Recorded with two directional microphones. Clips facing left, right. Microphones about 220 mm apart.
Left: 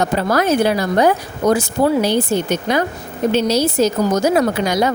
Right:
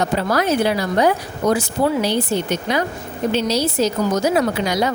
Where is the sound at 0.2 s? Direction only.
50° left (ahead or behind).